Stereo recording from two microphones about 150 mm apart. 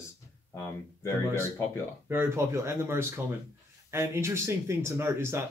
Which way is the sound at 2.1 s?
15° right (ahead or behind).